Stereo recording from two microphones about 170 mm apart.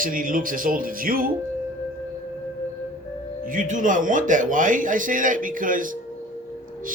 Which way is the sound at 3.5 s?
50° right (ahead or behind).